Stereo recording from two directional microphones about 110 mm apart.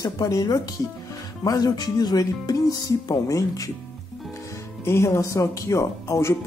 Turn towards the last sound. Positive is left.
turn(degrees=25)  # may be behind; listen again after turning